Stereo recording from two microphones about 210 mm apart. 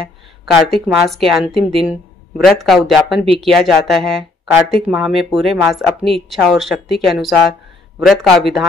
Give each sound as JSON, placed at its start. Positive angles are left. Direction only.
{"t": 0.5, "sound": "speech", "side_deg": 0}